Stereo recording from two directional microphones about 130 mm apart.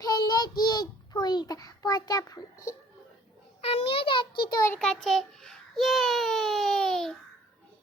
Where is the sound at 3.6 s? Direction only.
55° left (ahead or behind); by 4.6 s 35° left (ahead or behind).